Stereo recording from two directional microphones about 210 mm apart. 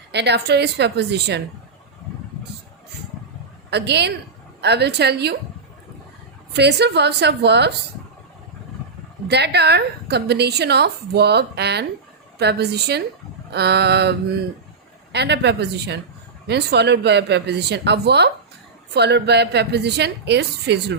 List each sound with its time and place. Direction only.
0.1 s a woman's voice: 55° right (ahead or behind)
3.7 s a woman's voice: 55° right (ahead or behind)
6.5 s a woman's voice: 55° right (ahead or behind)
9.2 s a woman's voice: 50° right (ahead or behind)